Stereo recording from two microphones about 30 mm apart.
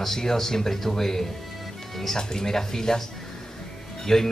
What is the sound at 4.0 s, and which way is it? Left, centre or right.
Speech, centre.